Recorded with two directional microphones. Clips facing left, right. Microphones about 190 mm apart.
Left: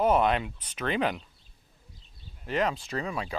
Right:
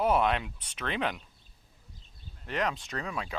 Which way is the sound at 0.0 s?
Centre (ahead or behind).